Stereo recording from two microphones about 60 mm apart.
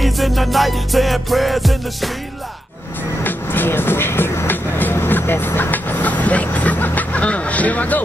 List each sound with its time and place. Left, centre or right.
0.0 s music: centre
3.3 s music: left